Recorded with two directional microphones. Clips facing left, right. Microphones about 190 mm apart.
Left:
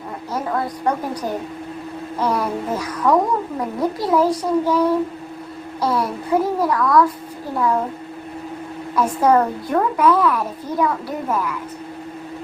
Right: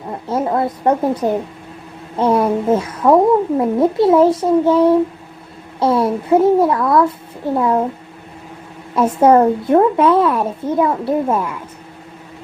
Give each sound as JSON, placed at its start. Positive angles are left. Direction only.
{"t": 0.3, "sound": "a woman's voice", "side_deg": -25}
{"t": 9.0, "sound": "a woman's voice", "side_deg": -25}